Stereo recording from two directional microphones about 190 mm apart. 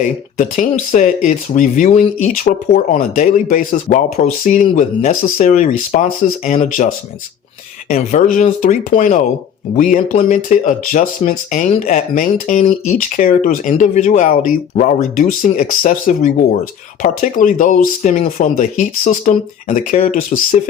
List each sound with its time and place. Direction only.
0.0 s speech: 45° left (ahead or behind)
6.8 s speech: 35° left (ahead or behind)